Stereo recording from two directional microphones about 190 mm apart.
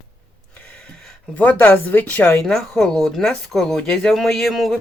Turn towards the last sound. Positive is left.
turn(degrees=0)  # may be behind; listen again after turning